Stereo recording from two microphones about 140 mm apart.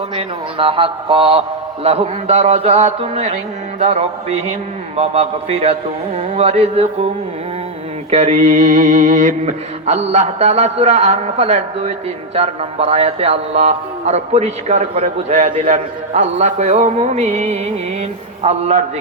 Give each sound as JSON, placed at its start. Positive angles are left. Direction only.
{"t": 0.2, "sound": "a man's voice", "side_deg": -40}
{"t": 8.1, "sound": "mantra", "side_deg": -55}
{"t": 9.8, "sound": "a man's voice", "side_deg": -55}